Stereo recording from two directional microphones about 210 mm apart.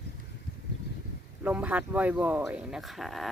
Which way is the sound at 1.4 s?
5° right (ahead or behind).